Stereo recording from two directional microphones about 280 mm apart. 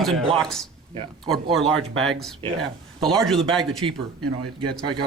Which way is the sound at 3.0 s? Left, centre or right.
Centre.